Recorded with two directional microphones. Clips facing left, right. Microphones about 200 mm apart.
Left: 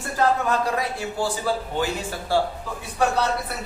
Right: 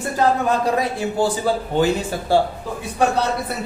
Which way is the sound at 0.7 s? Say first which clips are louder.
Right 6 dB; 20° right (ahead or behind).